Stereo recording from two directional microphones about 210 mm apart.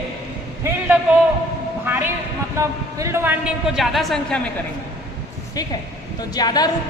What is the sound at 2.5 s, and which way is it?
Speech, 15° right (ahead or behind).